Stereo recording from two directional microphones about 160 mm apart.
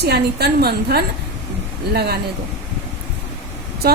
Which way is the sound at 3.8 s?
75° right (ahead or behind).